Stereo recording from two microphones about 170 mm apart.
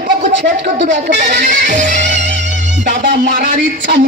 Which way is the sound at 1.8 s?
90° right.